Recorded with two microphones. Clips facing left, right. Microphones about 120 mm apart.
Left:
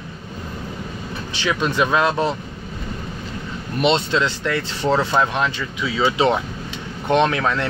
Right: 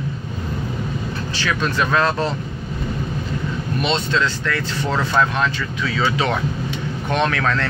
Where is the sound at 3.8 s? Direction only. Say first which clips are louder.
Left 3 dB; 25° left (ahead or behind).